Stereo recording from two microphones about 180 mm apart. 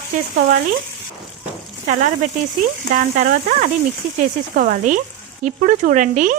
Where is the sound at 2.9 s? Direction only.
45° right (ahead or behind).